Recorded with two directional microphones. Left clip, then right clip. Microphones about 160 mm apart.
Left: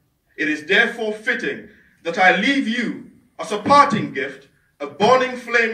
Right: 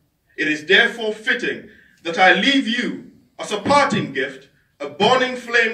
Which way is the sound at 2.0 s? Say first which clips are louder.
Right 1 dB; 55° right (ahead or behind).